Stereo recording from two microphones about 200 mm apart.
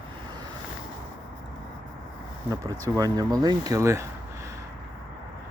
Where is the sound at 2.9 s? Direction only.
20° right (ahead or behind).